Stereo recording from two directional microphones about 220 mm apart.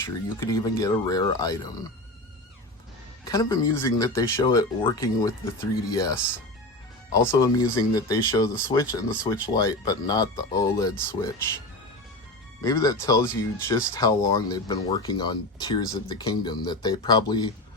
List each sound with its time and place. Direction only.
0.0 s speech: 15° left (ahead or behind)
3.2 s speech: 15° left (ahead or behind)
12.6 s speech: 15° left (ahead or behind)